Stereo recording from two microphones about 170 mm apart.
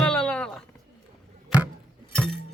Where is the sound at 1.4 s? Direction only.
5° right (ahead or behind).